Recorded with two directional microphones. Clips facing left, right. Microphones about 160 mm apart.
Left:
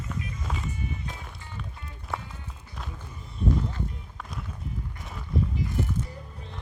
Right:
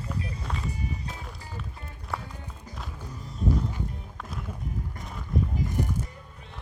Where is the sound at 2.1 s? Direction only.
Centre (ahead or behind).